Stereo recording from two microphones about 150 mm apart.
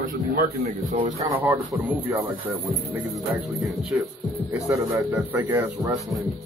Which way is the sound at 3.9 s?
10° right (ahead or behind).